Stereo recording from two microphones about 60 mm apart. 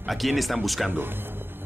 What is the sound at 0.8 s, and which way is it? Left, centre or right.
Speech, right.